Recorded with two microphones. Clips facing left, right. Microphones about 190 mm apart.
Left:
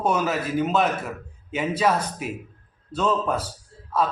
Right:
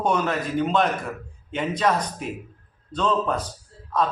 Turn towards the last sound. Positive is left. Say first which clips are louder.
# even
turn(degrees=5)  # may be behind; listen again after turning